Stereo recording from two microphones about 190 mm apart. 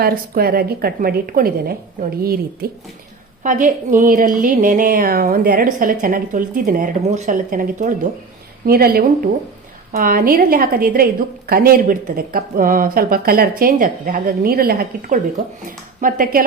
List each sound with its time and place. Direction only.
0.0 s a woman's voice: 50° right (ahead or behind)